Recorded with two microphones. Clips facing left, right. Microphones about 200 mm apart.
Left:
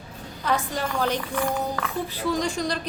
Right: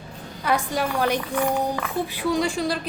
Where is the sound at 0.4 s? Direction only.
10° right (ahead or behind).